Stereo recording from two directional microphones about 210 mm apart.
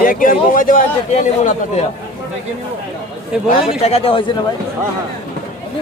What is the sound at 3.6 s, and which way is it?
Speech, 30° left (ahead or behind).